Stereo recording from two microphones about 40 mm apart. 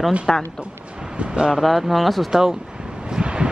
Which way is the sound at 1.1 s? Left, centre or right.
Right.